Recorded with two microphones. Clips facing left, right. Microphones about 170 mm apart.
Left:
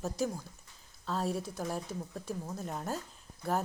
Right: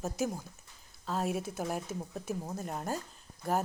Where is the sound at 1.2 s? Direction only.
20° right (ahead or behind).